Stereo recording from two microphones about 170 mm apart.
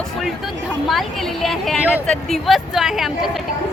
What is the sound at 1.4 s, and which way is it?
A woman's voice, centre (ahead or behind).